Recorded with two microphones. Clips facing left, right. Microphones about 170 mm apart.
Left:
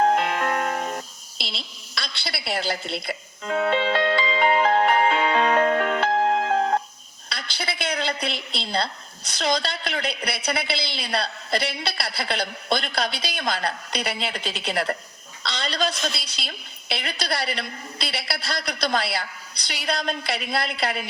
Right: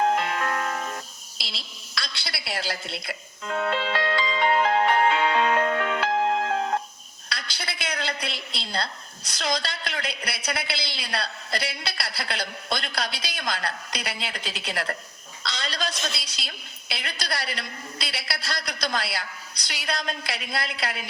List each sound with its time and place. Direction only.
0.0 s music: 50° left (ahead or behind)
1.4 s a woman's voice: 55° left (ahead or behind)
2.8 s speech: centre (ahead or behind)
3.4 s music: 50° left (ahead or behind)
7.3 s a woman's voice: 60° left (ahead or behind)